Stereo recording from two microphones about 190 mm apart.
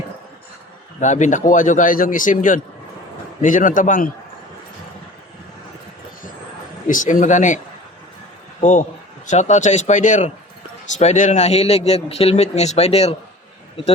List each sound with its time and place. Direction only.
0.9 s a man's voice: 40° left (ahead or behind)
6.8 s a man's voice: 40° left (ahead or behind)
9.2 s a man's voice: 40° left (ahead or behind)